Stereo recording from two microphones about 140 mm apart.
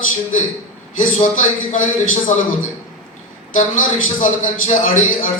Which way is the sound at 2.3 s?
55° left (ahead or behind).